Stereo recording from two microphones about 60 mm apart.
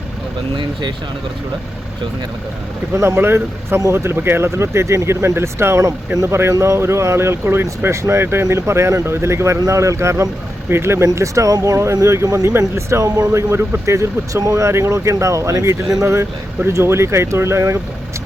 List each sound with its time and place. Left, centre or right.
2.9 s speech: right
12.5 s speech: right